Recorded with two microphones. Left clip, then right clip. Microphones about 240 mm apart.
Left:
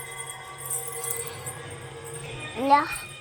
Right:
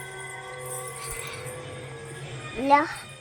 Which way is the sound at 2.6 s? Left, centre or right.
Centre.